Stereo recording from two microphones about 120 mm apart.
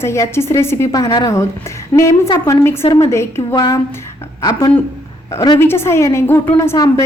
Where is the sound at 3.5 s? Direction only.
30° left (ahead or behind).